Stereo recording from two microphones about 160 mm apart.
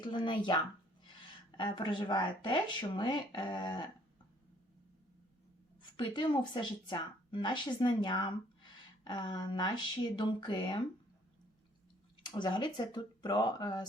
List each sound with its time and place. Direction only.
0.0 s a woman's voice: 30° left (ahead or behind)
1.5 s a woman's voice: 30° left (ahead or behind)
6.0 s a woman's voice: 30° left (ahead or behind)
12.2 s a woman's voice: 30° left (ahead or behind)